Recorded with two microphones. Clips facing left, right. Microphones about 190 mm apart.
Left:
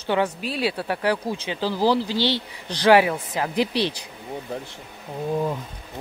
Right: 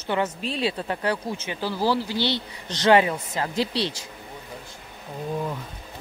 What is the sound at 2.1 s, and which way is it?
Speech, 15° right (ahead or behind).